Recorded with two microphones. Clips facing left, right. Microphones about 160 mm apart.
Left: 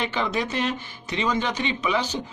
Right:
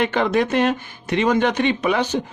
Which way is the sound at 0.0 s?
55° right (ahead or behind).